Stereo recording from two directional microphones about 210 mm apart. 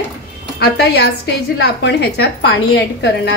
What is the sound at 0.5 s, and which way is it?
A woman's voice, 50° left (ahead or behind).